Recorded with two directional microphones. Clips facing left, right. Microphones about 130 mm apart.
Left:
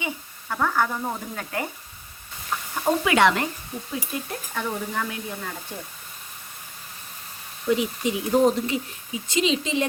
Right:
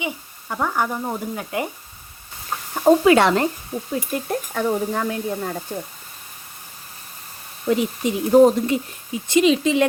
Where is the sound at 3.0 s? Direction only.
35° right (ahead or behind).